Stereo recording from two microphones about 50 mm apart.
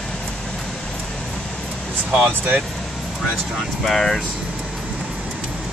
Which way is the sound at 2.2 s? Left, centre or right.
Right.